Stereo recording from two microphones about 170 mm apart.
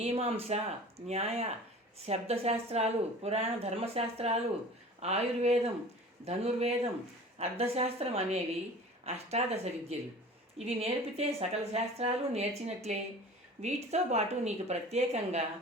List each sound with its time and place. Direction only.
0.0 s speech: 35° right (ahead or behind)